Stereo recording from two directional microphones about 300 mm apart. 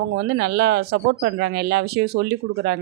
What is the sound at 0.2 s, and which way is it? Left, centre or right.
Speech, right.